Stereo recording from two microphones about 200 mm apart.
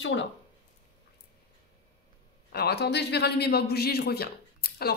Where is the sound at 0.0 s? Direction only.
65° left (ahead or behind).